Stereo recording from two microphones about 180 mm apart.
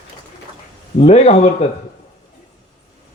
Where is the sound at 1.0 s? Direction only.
35° left (ahead or behind).